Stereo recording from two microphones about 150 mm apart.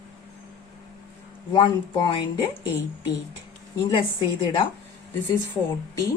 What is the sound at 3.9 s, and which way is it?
Speech, 35° left (ahead or behind).